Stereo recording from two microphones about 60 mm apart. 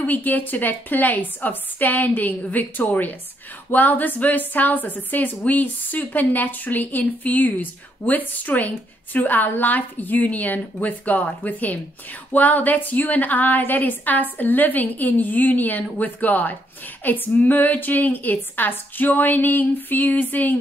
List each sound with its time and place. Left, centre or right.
0.0 s a woman's voice: left